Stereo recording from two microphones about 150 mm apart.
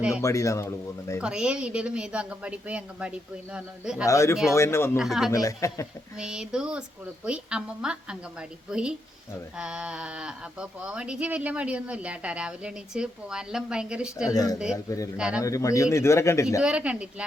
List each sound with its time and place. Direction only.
0.2 s a man's voice: 20° left (ahead or behind)
1.2 s speech: 5° right (ahead or behind)
4.0 s a man's voice: 20° left (ahead or behind)
4.9 s a woman's voice: centre (ahead or behind)
5.3 s a man's voice: 20° left (ahead or behind)
6.1 s a woman's voice: 5° right (ahead or behind)
14.3 s a man's voice: 25° left (ahead or behind)
16.6 s speech: 10° right (ahead or behind)